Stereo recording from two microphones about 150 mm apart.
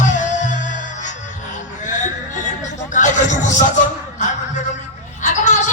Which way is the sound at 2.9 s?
55° left (ahead or behind).